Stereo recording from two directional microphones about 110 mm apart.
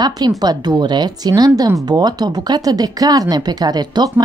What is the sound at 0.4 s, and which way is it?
Speech, 40° right (ahead or behind).